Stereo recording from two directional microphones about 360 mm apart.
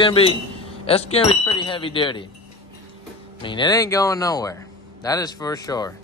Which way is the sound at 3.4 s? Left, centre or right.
Centre.